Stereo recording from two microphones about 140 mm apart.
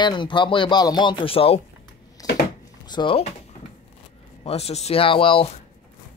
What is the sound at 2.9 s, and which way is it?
Speech, 35° left (ahead or behind).